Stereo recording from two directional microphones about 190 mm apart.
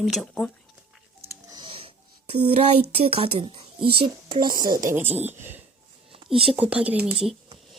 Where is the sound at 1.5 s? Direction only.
25° right (ahead or behind).